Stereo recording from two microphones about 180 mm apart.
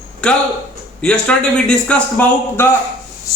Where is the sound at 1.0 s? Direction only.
5° left (ahead or behind).